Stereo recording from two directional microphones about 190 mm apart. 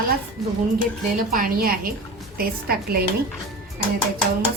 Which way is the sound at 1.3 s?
50° right (ahead or behind).